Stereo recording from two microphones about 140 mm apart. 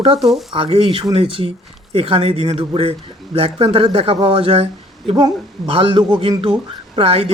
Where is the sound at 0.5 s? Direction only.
40° right (ahead or behind).